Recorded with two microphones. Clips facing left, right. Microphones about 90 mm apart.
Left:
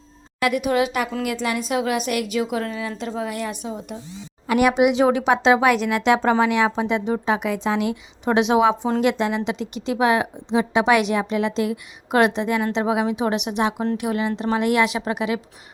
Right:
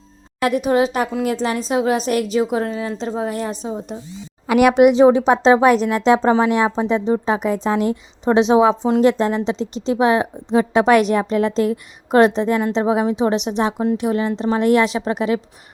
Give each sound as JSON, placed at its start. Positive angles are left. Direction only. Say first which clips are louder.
{"t": 0.4, "sound": "a woman's voice", "louder": "right 3 dB", "side_deg": -30}
{"t": 4.5, "sound": "speech", "louder": "right 4 dB", "side_deg": -75}
{"t": 4.8, "sound": "a woman's voice", "louder": "right 6 dB", "side_deg": -40}
{"t": 10.5, "sound": "a woman's voice", "louder": "right 4 dB", "side_deg": -45}